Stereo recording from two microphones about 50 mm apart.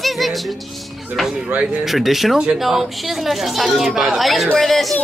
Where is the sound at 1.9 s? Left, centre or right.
Centre.